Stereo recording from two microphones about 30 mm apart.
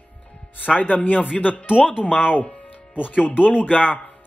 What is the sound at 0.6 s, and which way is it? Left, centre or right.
Speech, left.